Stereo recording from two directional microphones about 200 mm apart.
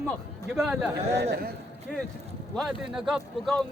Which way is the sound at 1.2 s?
50° right (ahead or behind).